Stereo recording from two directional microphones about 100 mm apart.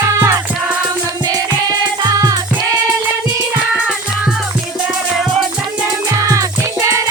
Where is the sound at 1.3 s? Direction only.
45° right (ahead or behind).